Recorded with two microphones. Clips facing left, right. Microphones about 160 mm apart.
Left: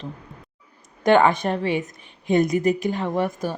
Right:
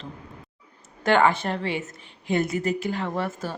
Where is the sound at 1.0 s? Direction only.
15° left (ahead or behind).